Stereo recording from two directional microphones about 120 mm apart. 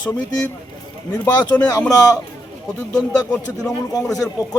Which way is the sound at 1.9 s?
30° left (ahead or behind).